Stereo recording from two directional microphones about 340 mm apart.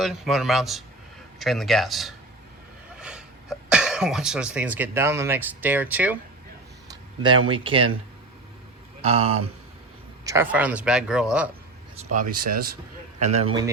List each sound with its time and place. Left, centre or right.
0.0 s speech: centre
9.0 s a man's voice: centre
10.2 s speech: centre
12.1 s a man's voice: right